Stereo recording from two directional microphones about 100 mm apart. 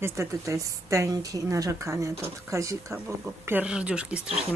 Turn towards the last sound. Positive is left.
turn(degrees=-10)  # may be behind; listen again after turning